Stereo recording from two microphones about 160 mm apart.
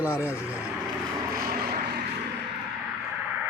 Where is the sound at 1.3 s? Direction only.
65° right (ahead or behind); by 2.0 s 85° right.